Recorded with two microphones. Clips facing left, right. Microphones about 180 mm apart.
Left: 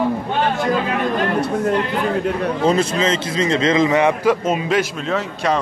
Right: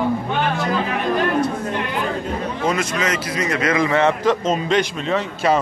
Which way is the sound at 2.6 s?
30° left (ahead or behind).